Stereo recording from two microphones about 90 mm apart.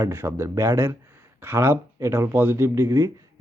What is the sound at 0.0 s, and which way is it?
Speech, 30° right (ahead or behind).